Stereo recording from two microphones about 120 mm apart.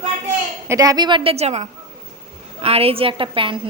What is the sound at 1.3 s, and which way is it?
A woman's voice, 60° right (ahead or behind).